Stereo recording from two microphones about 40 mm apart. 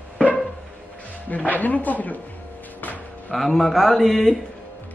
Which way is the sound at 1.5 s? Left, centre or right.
Left.